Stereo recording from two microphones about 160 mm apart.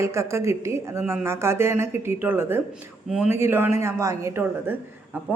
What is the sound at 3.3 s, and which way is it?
A woman's voice, 15° right (ahead or behind).